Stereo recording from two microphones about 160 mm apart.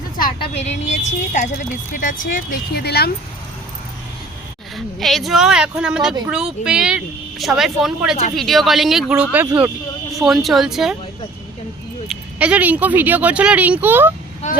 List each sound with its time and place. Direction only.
0.5 s speech: 45° left (ahead or behind); by 3.1 s 80° left
4.9 s speech: centre (ahead or behind); by 9.7 s 15° right (ahead or behind)
10.2 s speech: centre (ahead or behind)
12.0 s speech: 10° right (ahead or behind)
14.4 s speech: 50° left (ahead or behind)